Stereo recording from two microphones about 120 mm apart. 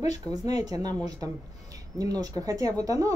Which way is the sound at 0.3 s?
30° right (ahead or behind).